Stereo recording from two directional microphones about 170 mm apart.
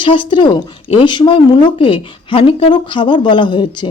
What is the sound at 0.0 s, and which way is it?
Speech, 30° left (ahead or behind).